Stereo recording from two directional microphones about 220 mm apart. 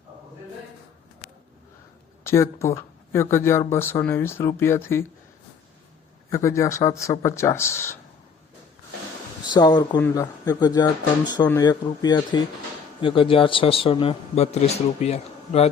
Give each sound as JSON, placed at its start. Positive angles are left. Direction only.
{"t": 2.2, "sound": "speech", "side_deg": 10}
{"t": 6.3, "sound": "speech", "side_deg": 15}
{"t": 9.5, "sound": "speech", "side_deg": 20}